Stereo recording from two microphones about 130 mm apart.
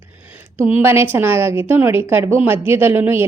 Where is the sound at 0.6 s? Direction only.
15° right (ahead or behind).